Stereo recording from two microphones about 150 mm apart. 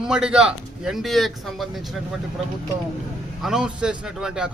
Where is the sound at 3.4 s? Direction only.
5° right (ahead or behind).